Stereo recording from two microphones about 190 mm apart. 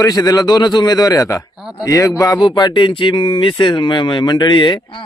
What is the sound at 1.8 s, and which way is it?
Speech, 20° left (ahead or behind).